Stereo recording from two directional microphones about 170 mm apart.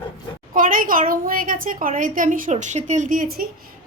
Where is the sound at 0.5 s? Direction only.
55° right (ahead or behind).